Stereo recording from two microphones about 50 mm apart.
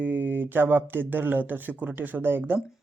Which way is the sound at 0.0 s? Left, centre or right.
Right.